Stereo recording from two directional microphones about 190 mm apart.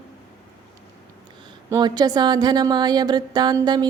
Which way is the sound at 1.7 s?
20° right (ahead or behind).